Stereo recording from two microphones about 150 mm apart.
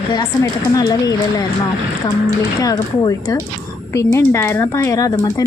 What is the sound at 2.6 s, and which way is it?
Speech, 20° left (ahead or behind).